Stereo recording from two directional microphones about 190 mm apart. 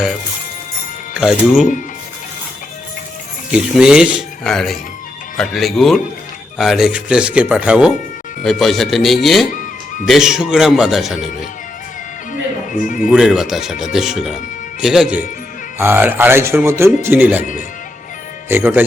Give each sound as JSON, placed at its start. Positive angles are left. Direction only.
{"t": 1.1, "sound": "speech", "side_deg": -5}
{"t": 3.5, "sound": "speech", "side_deg": -5}
{"t": 9.5, "sound": "music", "side_deg": 45}
{"t": 10.1, "sound": "speech", "side_deg": -5}
{"t": 12.3, "sound": "music", "side_deg": 45}
{"t": 13.1, "sound": "speech", "side_deg": -5}
{"t": 18.4, "sound": "speech", "side_deg": -10}